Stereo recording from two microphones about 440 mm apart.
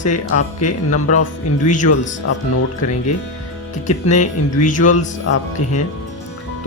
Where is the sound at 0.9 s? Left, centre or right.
Left.